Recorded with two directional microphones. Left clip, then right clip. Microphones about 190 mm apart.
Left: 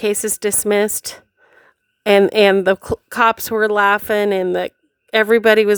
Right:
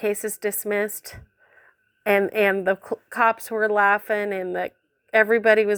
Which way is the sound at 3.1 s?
55° left (ahead or behind).